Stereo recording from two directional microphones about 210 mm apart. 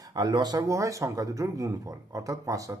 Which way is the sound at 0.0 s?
20° right (ahead or behind).